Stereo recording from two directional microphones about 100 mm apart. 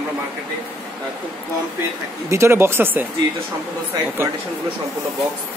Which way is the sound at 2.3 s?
25° right (ahead or behind).